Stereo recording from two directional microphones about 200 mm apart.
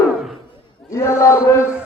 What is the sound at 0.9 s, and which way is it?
Speech, 15° left (ahead or behind).